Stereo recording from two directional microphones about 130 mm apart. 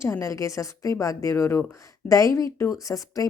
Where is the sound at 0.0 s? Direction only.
20° left (ahead or behind).